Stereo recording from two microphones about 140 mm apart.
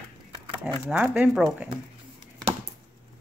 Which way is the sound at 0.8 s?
5° right (ahead or behind).